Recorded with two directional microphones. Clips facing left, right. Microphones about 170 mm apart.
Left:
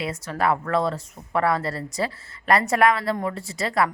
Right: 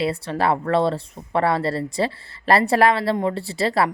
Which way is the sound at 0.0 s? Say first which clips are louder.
Right 3 dB; 30° right (ahead or behind).